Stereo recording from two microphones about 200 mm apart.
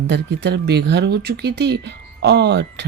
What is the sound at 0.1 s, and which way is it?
Speech, 60° right (ahead or behind).